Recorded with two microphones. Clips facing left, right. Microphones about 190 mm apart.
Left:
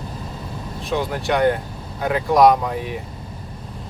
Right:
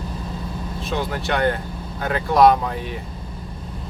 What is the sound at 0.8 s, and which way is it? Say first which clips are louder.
Speech: left 3 dB; 15° left (ahead or behind).